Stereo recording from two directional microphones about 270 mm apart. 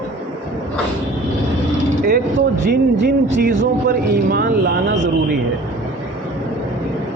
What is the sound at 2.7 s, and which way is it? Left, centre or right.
Speech, right.